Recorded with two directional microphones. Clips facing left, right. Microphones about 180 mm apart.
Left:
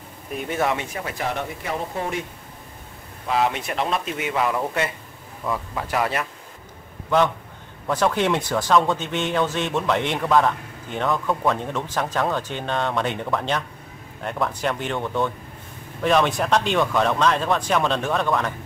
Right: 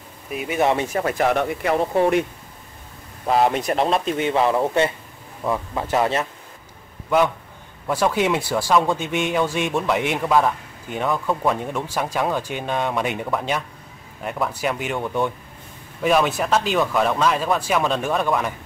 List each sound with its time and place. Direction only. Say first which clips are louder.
0.3 s speech: right 1 dB; 5° right (ahead or behind)
0.7 s speech: right 8 dB; 50° right (ahead or behind)
3.3 s a man's voice: right 4 dB; 40° right (ahead or behind)
7.8 s speech: right 1 dB; 10° right (ahead or behind)